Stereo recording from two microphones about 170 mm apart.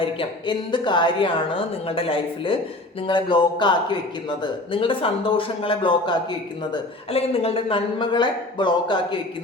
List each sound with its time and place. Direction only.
0.0 s a woman's voice: 30° left (ahead or behind)